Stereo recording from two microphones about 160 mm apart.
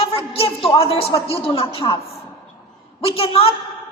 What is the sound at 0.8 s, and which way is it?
A woman's voice, 35° left (ahead or behind).